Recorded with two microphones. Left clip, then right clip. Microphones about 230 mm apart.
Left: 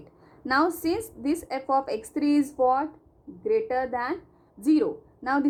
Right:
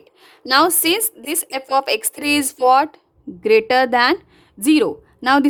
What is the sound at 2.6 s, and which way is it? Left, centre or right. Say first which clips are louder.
Speech: right 11 dB; right.